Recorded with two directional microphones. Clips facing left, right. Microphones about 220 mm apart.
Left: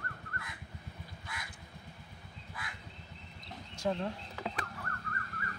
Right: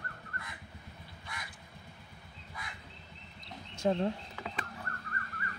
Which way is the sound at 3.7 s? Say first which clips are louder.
Right 4 dB; 25° right (ahead or behind).